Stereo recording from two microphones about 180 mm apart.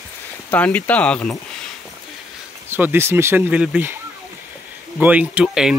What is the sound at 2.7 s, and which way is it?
Speech, 10° right (ahead or behind).